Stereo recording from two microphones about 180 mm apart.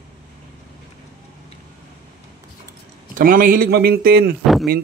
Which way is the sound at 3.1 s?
50° right (ahead or behind).